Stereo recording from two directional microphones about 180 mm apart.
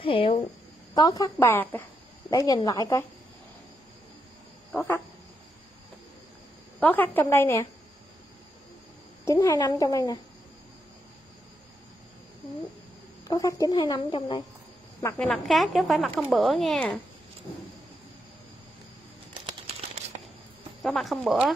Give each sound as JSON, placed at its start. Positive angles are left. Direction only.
{"t": 0.0, "sound": "a sound", "side_deg": 30}
{"t": 0.9, "sound": "speech", "side_deg": 20}
{"t": 4.7, "sound": "a woman's voice", "side_deg": 15}
{"t": 6.8, "sound": "a woman's voice", "side_deg": 10}
{"t": 9.2, "sound": "speech", "side_deg": 15}
{"t": 13.3, "sound": "speech", "side_deg": 25}
{"t": 15.1, "sound": "a woman's voice", "side_deg": 5}
{"t": 20.8, "sound": "a woman's voice", "side_deg": 0}